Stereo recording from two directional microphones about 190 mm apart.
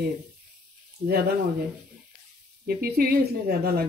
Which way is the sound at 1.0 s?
55° right (ahead or behind).